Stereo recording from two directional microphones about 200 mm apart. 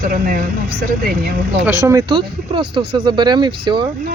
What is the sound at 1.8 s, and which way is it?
Speech, 15° right (ahead or behind).